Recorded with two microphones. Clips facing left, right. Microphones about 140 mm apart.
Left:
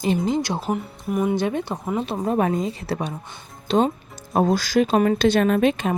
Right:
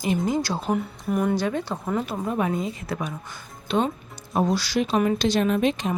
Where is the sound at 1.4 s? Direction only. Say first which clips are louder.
Left 2 dB; 20° left (ahead or behind).